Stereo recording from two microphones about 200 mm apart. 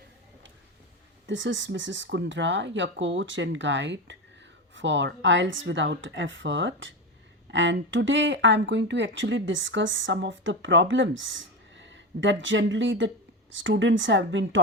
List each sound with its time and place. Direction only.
1.3 s speech: 70° right (ahead or behind)